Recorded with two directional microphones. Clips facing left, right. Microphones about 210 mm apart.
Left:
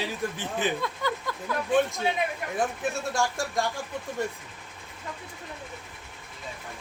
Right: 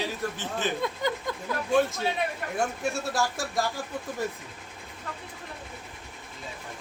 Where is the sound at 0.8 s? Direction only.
20° right (ahead or behind).